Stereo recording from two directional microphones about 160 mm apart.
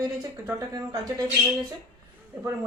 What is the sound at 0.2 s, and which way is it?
Speech, 25° right (ahead or behind).